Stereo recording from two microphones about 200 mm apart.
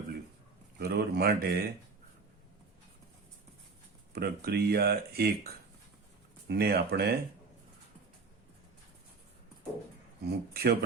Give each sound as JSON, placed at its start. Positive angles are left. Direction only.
{"t": 0.8, "sound": "speech", "side_deg": -55}
{"t": 4.1, "sound": "speech", "side_deg": -50}
{"t": 6.5, "sound": "speech", "side_deg": -55}
{"t": 10.2, "sound": "speech", "side_deg": -50}